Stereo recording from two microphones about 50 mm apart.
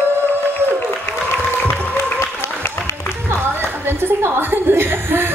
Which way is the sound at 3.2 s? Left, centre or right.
Right.